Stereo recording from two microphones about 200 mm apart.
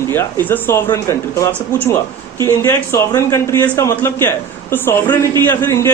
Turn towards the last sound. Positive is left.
turn(degrees=10)  # may be behind; listen again after turning